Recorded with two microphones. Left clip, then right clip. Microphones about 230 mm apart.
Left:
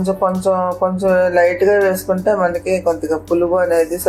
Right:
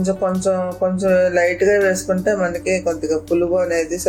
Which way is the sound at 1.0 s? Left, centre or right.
Centre.